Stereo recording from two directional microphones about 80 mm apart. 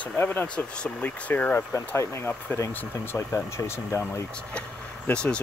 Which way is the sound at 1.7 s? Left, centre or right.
Left.